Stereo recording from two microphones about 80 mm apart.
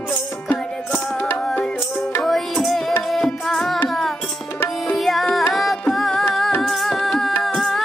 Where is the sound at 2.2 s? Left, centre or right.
Centre.